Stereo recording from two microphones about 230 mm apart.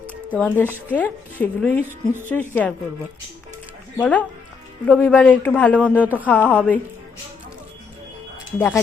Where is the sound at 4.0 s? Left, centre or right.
Centre.